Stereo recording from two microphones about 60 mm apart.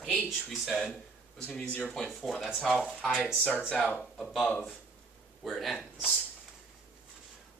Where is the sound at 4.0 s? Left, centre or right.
Centre.